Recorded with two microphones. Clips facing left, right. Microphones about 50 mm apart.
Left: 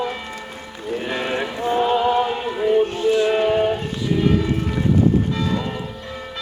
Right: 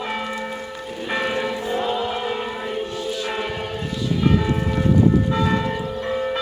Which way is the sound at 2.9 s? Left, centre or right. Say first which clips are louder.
Left 8 dB; left.